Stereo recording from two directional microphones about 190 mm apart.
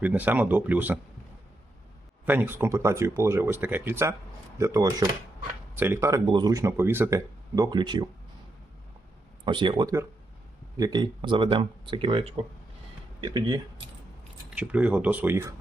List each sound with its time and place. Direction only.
0.0 s speech: 10° right (ahead or behind)
2.2 s speech: 10° right (ahead or behind)
9.4 s speech: 25° right (ahead or behind)
14.5 s speech: 5° right (ahead or behind)